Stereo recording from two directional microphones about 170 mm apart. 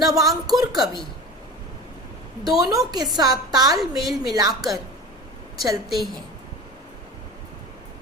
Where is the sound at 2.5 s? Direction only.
20° right (ahead or behind).